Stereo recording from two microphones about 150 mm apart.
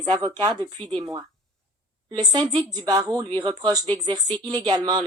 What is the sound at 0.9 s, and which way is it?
A woman's voice, 25° right (ahead or behind).